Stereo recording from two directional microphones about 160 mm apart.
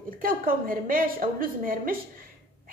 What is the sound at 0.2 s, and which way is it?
A woman's voice, 60° right (ahead or behind).